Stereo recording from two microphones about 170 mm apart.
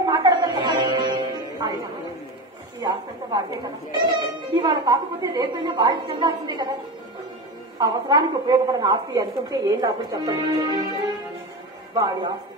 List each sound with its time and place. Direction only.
0.0 s music: 25° right (ahead or behind)
2.8 s a woman's voice: 25° right (ahead or behind)
7.8 s a woman's voice: 25° right (ahead or behind)
11.9 s a woman's voice: 25° right (ahead or behind)